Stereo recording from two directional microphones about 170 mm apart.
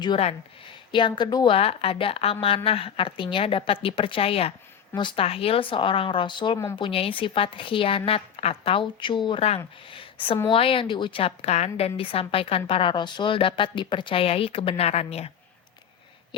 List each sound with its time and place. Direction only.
0.0 s a woman's voice: 35° left (ahead or behind)
1.5 s a woman's voice: 35° left (ahead or behind)
9.9 s a sound: 30° left (ahead or behind)
10.5 s a woman's voice: 30° left (ahead or behind)